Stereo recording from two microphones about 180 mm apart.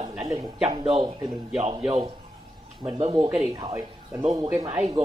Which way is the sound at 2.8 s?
30° right (ahead or behind).